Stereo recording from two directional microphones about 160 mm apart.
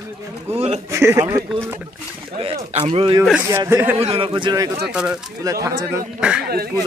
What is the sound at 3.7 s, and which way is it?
Speech, 15° right (ahead or behind).